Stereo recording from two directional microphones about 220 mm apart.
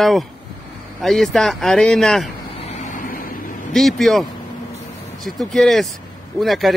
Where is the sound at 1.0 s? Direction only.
Centre (ahead or behind).